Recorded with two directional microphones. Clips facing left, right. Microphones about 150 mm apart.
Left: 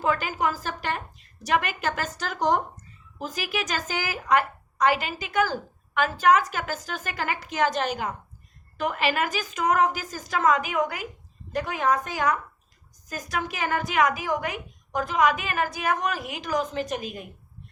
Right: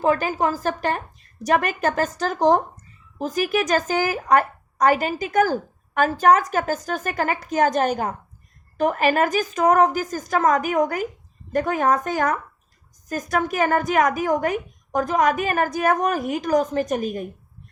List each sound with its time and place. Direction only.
0.0 s a woman's voice: 40° right (ahead or behind)